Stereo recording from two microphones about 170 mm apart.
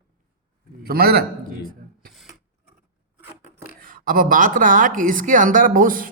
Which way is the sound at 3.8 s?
55° right (ahead or behind).